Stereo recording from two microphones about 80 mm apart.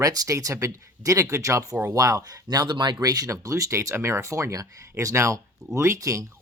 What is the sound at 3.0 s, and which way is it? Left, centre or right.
Speech, right.